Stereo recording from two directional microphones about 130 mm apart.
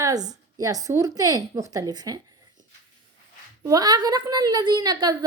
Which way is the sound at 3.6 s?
30° right (ahead or behind).